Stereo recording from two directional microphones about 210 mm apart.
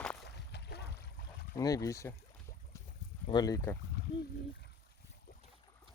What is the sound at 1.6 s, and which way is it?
Speech, 15° left (ahead or behind).